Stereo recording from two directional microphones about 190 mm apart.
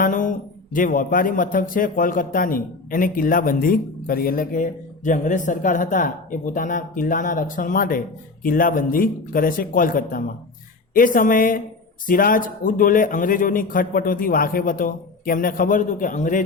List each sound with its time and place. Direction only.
0.0 s speech: 45° left (ahead or behind)